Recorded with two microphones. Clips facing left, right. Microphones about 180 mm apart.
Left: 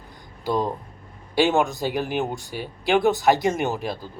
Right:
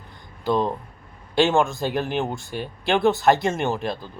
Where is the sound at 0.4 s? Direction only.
10° left (ahead or behind).